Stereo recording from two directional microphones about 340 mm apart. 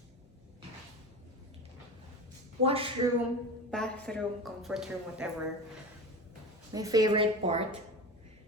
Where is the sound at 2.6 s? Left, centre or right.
Centre.